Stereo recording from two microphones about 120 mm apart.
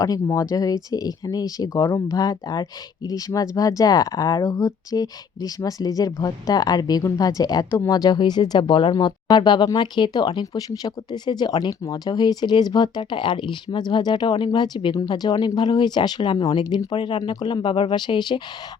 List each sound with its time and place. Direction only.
0.0 s speech: 25° left (ahead or behind)